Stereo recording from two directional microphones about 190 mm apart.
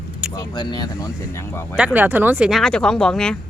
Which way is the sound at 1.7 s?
5° right (ahead or behind).